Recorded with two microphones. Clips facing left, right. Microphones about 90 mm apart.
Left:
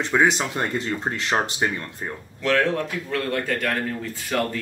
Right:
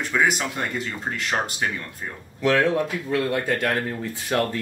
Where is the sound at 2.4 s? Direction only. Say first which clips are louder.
Right 2 dB; 15° right (ahead or behind).